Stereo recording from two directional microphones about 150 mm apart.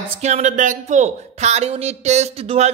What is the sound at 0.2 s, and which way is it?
Speech, 50° right (ahead or behind).